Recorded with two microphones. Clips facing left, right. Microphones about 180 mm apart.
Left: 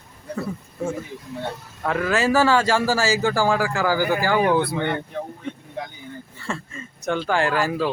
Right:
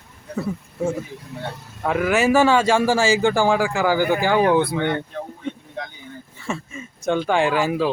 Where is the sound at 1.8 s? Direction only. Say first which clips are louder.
Right 2 dB; 15° right (ahead or behind).